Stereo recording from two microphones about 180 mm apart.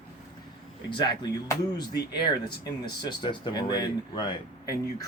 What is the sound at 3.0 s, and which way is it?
Speech, 25° left (ahead or behind).